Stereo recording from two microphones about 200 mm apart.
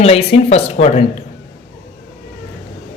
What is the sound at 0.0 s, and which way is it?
Speech, 30° left (ahead or behind).